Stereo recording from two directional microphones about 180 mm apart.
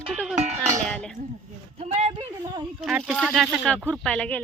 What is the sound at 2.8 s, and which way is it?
Speech, 5° right (ahead or behind).